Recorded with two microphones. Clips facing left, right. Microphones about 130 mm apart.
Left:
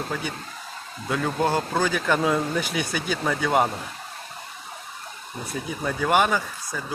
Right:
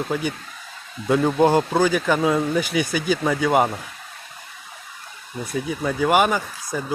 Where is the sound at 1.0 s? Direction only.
30° right (ahead or behind).